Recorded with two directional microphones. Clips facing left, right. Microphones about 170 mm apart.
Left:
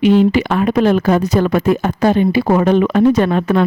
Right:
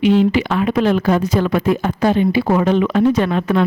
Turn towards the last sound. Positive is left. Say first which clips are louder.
# left 3 dB
turn(degrees=45)  # may be behind; listen again after turning